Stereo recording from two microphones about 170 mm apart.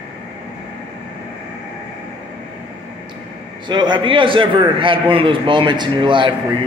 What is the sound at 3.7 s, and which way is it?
A man's voice, 25° right (ahead or behind).